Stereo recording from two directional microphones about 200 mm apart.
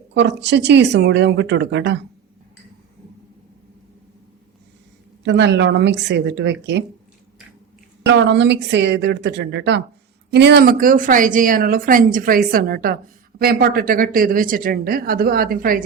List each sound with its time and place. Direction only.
0.1 s speech: 60° right (ahead or behind)
5.2 s speech: 60° right (ahead or behind)
8.0 s a woman's voice: 60° right (ahead or behind); by 15.8 s 45° right (ahead or behind)